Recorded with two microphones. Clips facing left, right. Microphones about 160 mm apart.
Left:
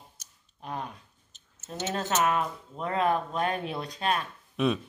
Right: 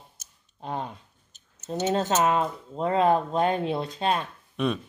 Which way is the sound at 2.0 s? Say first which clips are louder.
Right 2 dB; 30° right (ahead or behind).